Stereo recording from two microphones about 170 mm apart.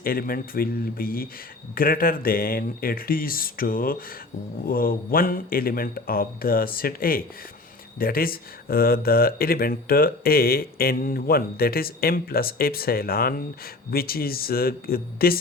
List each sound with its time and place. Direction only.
0.0 s speech: 60° left (ahead or behind)